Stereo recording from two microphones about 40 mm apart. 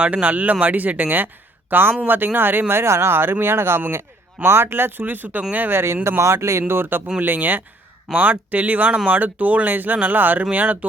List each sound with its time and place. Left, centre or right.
0.0 s speech: right
2.7 s speech: right
4.4 s speech: right
5.4 s speech: right
5.6 s speech: right
7.2 s speech: right